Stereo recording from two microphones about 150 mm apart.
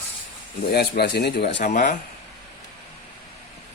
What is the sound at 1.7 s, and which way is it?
Speech, 55° left (ahead or behind).